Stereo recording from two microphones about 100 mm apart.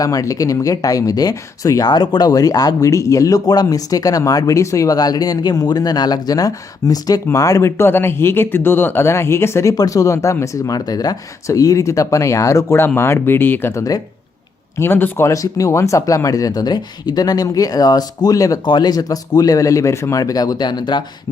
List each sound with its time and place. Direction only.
0.0 s speech: 35° left (ahead or behind)
15.3 s speech: 35° left (ahead or behind)
18.6 s speech: 45° left (ahead or behind)